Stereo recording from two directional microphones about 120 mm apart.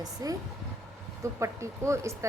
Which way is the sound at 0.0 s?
30° right (ahead or behind).